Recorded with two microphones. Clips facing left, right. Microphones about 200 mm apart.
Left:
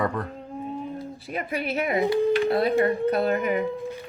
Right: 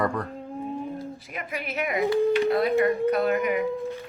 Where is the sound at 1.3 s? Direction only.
30° left (ahead or behind).